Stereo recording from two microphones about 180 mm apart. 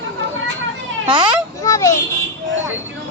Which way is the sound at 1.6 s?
15° left (ahead or behind).